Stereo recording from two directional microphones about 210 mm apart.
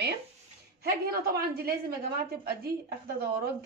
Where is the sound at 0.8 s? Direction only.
45° right (ahead or behind).